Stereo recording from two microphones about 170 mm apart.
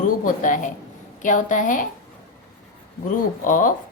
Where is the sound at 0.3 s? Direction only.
50° left (ahead or behind).